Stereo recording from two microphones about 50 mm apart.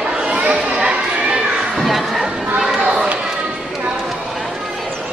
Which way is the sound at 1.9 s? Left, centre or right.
Centre.